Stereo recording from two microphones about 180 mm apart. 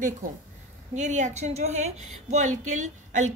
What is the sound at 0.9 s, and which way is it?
A woman's voice, 40° right (ahead or behind).